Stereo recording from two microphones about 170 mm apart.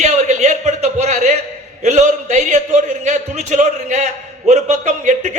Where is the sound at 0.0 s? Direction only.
40° right (ahead or behind).